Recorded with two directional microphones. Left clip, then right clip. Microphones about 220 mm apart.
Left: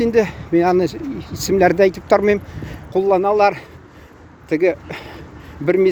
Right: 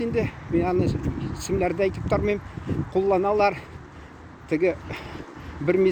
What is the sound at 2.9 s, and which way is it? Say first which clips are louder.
Speech: left 6 dB; 35° left (ahead or behind).